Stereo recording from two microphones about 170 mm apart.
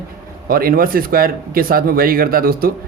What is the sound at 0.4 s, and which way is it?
Speech, 60° right (ahead or behind).